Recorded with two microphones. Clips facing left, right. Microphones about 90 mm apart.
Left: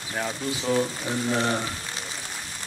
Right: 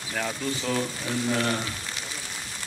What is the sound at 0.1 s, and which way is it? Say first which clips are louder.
Speech: even; 15° left (ahead or behind).